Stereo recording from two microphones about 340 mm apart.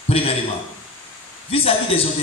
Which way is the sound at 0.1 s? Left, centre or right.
Centre.